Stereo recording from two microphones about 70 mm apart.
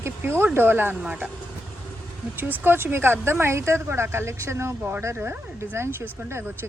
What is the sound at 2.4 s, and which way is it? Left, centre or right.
Speech, right.